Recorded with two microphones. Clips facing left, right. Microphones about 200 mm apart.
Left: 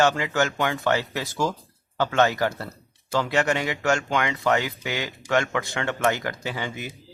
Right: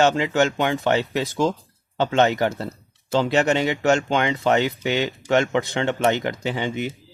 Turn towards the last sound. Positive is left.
turn(degrees=-20)  # may be behind; listen again after turning